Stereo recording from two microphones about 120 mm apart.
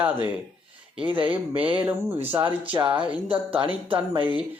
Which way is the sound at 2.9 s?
45° right (ahead or behind).